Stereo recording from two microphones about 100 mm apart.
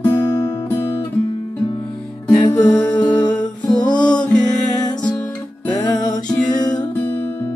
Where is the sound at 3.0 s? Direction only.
45° left (ahead or behind).